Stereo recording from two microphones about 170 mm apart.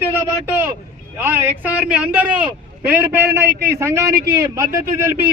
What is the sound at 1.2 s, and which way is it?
A man's voice, 10° right (ahead or behind).